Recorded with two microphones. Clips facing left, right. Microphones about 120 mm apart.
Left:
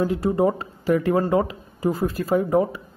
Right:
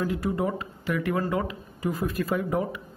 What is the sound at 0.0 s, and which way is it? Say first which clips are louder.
Speech: left 7 dB; 30° left (ahead or behind).